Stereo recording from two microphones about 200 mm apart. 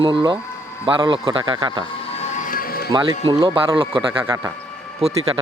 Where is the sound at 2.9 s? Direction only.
25° right (ahead or behind).